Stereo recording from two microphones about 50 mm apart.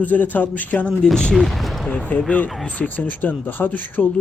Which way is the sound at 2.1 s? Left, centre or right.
Left.